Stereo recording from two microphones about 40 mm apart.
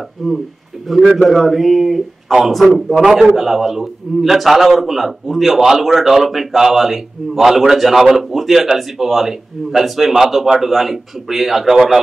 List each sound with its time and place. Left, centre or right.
0.2 s a man's voice: centre
2.9 s a man's voice: centre